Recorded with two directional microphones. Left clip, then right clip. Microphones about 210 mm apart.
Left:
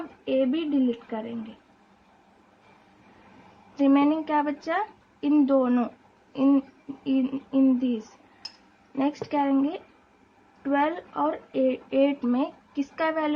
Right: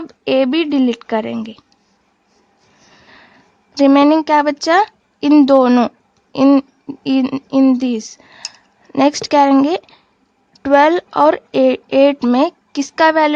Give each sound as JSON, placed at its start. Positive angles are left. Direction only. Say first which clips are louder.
{"t": 0.3, "sound": "speech", "louder": "right 11 dB", "side_deg": -55}
{"t": 3.8, "sound": "speech", "louder": "right 12 dB", "side_deg": -45}